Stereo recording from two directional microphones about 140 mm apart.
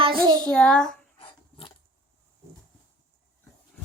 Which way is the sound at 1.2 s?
40° left (ahead or behind).